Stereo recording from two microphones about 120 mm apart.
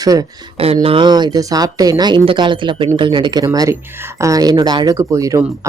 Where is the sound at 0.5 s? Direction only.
55° right (ahead or behind).